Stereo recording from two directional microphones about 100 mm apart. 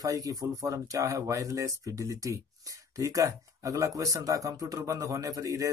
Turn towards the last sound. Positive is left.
turn(degrees=-35)  # may be behind; listen again after turning